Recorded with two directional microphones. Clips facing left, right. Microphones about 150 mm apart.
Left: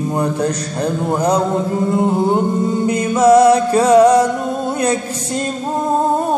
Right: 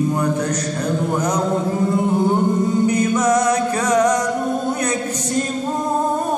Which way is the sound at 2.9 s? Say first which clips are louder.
Left 5 dB; 30° left (ahead or behind).